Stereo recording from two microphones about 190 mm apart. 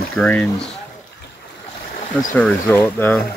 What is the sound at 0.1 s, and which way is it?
Speech, 5° left (ahead or behind).